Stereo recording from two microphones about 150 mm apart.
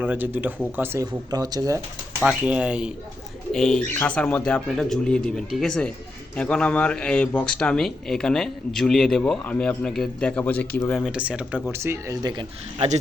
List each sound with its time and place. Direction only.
0.0 s speech: 10° right (ahead or behind)
1.3 s speech: 25° right (ahead or behind)
2.2 s speech: 10° right (ahead or behind)
3.5 s speech: 5° left (ahead or behind)
10.9 s speech: 5° right (ahead or behind); by 12.5 s 25° right (ahead or behind)